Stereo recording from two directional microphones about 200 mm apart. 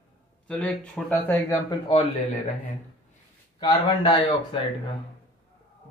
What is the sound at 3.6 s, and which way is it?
Speech, 20° left (ahead or behind).